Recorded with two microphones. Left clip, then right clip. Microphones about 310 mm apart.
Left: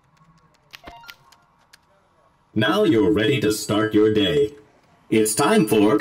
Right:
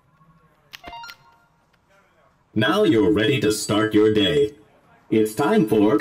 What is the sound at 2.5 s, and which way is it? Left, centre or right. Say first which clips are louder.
Speech: even; centre.